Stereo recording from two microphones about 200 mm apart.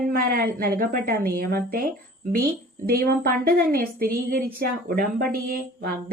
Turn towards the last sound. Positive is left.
turn(degrees=-45)  # may be behind; listen again after turning